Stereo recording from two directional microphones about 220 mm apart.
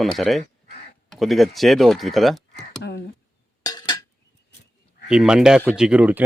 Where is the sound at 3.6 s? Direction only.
20° left (ahead or behind).